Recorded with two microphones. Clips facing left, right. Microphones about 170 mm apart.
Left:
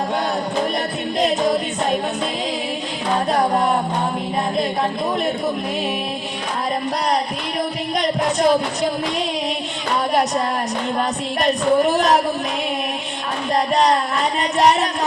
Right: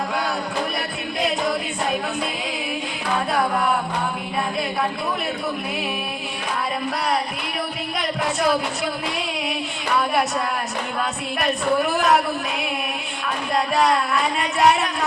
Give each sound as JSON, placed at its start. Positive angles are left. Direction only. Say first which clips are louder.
{"t": 1.4, "sound": "a capella", "louder": "left 4 dB", "side_deg": 20}
{"t": 3.3, "sound": "music", "louder": "left 3 dB", "side_deg": 40}
{"t": 7.9, "sound": "music", "louder": "left 5 dB", "side_deg": 20}
{"t": 11.8, "sound": "a man's voice", "louder": "left 3 dB", "side_deg": 40}